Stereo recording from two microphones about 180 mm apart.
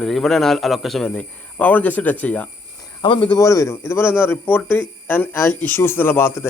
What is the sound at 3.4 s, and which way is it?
Speech, 15° left (ahead or behind).